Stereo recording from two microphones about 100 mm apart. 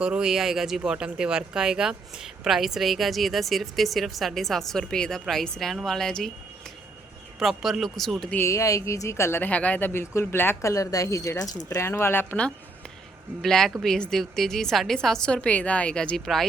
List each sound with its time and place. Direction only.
0.0 s speech: 10° right (ahead or behind)
7.3 s speech: centre (ahead or behind)
8.4 s speech: 30° left (ahead or behind)
13.4 s speech: 5° left (ahead or behind)